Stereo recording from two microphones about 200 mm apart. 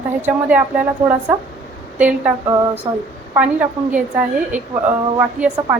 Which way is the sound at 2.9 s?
25° right (ahead or behind).